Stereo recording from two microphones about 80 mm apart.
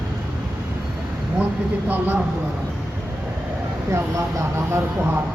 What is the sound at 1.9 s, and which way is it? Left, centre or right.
Speech, right.